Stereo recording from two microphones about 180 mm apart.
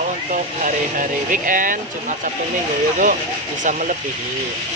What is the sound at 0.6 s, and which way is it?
Speech, 45° right (ahead or behind).